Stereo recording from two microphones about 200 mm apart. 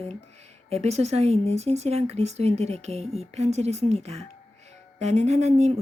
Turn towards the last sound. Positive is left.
turn(degrees=-35)  # may be behind; listen again after turning